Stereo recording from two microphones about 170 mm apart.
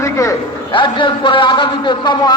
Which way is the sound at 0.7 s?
30° left (ahead or behind).